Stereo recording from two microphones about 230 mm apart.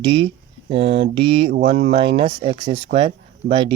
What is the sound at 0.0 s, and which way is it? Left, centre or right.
Speech, right.